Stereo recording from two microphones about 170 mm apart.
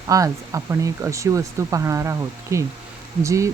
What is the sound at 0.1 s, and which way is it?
Speech, 20° right (ahead or behind).